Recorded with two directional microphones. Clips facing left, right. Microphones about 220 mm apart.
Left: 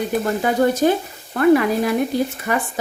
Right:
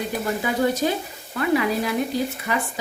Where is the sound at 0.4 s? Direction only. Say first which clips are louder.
Left 5 dB; 50° left (ahead or behind).